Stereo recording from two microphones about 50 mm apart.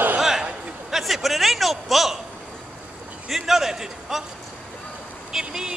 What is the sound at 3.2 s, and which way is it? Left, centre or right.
A man's voice, centre.